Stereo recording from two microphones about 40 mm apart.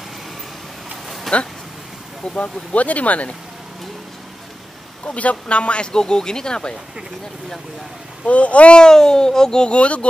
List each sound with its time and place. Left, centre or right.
1.3 s speech: centre
2.3 s speech: left
5.0 s speech: left
8.3 s speech: left
8.8 s speech: centre
9.7 s speech: left